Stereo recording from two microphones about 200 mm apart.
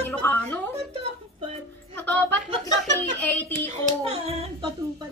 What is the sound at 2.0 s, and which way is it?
Speech, 10° left (ahead or behind).